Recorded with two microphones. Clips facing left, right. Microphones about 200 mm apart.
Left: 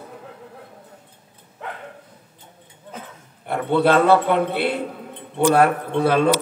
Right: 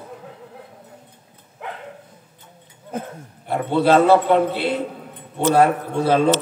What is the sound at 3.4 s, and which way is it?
A man's voice, 60° left (ahead or behind).